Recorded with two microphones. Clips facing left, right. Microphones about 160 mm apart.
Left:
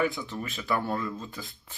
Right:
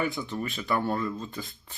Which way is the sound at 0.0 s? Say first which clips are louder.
Left 1 dB; centre (ahead or behind).